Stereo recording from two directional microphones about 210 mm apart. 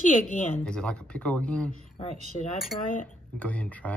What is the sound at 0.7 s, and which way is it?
Speech, 5° left (ahead or behind).